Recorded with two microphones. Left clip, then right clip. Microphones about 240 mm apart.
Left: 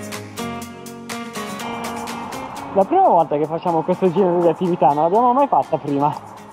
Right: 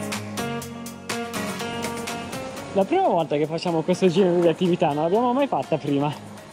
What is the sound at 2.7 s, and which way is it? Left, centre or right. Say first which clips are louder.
Speech: left 7 dB; right.